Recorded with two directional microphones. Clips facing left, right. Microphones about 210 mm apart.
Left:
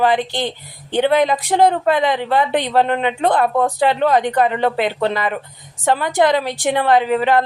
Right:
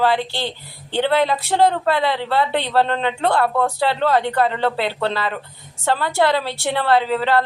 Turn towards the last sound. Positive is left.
turn(degrees=15)  # may be behind; listen again after turning